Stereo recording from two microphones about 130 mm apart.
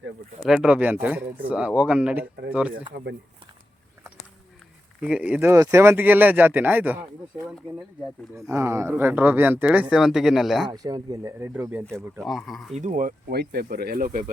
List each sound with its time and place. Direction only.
0.4 s speech: 5° right (ahead or behind)
4.9 s speech: 5° right (ahead or behind)
10.7 s speech: 30° right (ahead or behind)
12.2 s speech: centre (ahead or behind)
12.7 s speech: 70° right (ahead or behind); by 14.3 s 90° right